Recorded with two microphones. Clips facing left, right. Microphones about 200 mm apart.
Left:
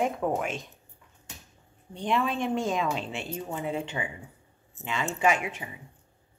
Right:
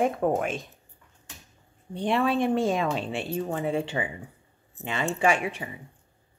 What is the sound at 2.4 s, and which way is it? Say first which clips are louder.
Speech: right 4 dB; 55° right (ahead or behind).